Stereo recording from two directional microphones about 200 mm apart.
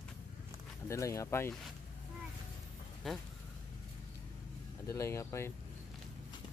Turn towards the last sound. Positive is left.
turn(degrees=15)  # may be behind; listen again after turning